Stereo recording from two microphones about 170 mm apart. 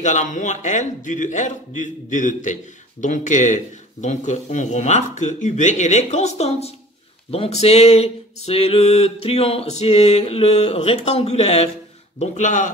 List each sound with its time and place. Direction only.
0.0 s a man's voice: 45° left (ahead or behind)
7.2 s a sound: 35° left (ahead or behind)
12.2 s a man's voice: 45° left (ahead or behind)